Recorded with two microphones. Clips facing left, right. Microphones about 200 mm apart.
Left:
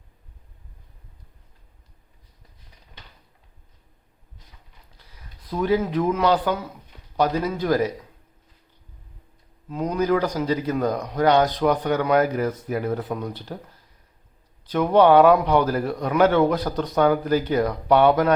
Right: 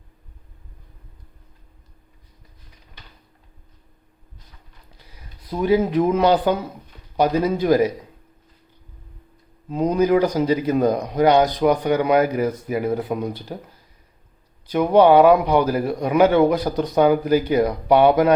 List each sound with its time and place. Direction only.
5.5 s speech: 15° right (ahead or behind)
9.6 s speech: 25° right (ahead or behind)
14.7 s speech: 10° right (ahead or behind)